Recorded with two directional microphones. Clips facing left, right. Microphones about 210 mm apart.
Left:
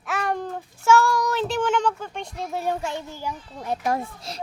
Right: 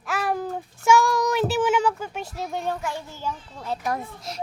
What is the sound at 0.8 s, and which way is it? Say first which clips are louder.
Speech: even; 15° right (ahead or behind).